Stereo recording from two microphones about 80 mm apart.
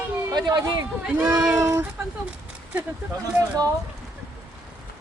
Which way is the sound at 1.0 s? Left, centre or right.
Centre.